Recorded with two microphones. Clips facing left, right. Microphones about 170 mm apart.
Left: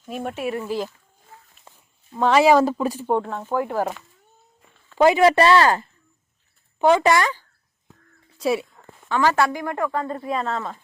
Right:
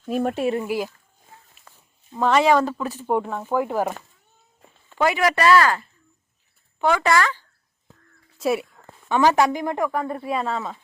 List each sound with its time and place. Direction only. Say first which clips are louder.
0.1 s speech: right 5 dB; 40° right (ahead or behind)
0.6 s speech: right 1 dB; 10° right (ahead or behind)
1.7 s a sound: left 3 dB; 25° left (ahead or behind)
2.1 s speech: left 2 dB; centre (ahead or behind)
3.1 s speech: right 3 dB; 10° right (ahead or behind)
4.9 s speech: left 6 dB; 25° left (ahead or behind)
8.4 s speech: even; centre (ahead or behind)
9.0 s speech: right 2 dB; 15° right (ahead or behind)